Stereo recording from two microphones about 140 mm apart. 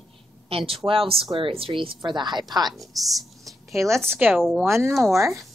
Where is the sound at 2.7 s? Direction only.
Centre (ahead or behind).